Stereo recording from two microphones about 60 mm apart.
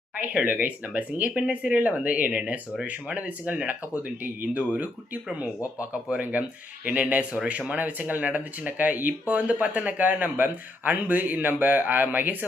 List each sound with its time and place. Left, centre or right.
0.2 s speech: right